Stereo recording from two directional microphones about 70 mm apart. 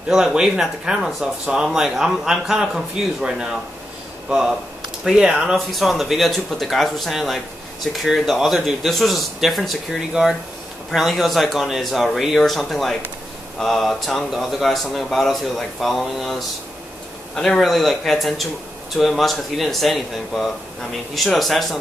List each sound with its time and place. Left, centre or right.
0.1 s speech: centre